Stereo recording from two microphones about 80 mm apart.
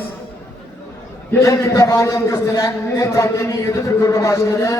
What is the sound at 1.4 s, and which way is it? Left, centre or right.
A man's voice, left.